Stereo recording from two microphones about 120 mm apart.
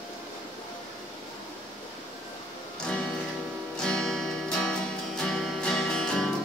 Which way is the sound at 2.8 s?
5° left (ahead or behind).